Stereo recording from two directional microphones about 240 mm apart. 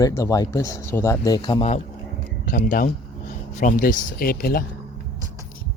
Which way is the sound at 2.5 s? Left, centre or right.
Left.